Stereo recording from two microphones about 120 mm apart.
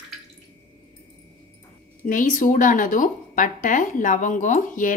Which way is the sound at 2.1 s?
90° left.